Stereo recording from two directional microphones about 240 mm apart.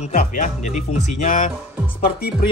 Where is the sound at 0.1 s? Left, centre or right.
Left.